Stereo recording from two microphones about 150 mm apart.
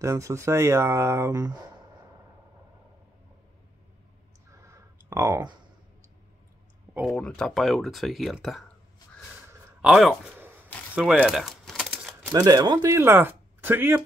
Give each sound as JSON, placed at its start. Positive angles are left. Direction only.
{"t": 0.0, "sound": "speech", "side_deg": -20}
{"t": 4.5, "sound": "a sound", "side_deg": -20}
{"t": 7.1, "sound": "speech", "side_deg": 5}
{"t": 9.8, "sound": "speech", "side_deg": -5}
{"t": 11.1, "sound": "a sound", "side_deg": 0}
{"t": 12.3, "sound": "speech", "side_deg": -25}